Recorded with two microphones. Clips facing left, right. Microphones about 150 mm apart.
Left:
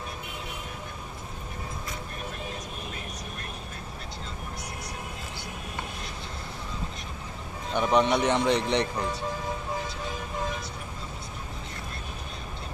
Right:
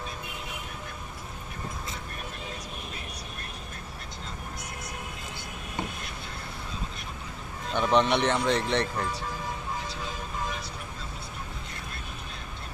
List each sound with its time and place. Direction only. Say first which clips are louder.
7.7 s speech: left 1 dB; 10° left (ahead or behind)